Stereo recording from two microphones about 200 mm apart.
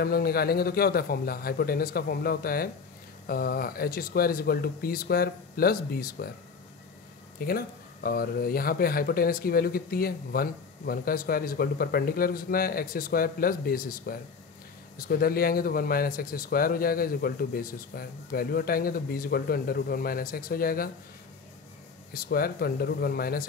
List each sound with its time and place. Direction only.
0.0 s speech: 50° left (ahead or behind)
7.3 s speech: 50° left (ahead or behind)
22.1 s speech: 50° left (ahead or behind)